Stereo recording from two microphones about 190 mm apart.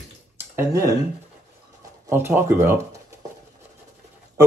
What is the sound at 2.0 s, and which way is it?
Speech, 10° right (ahead or behind).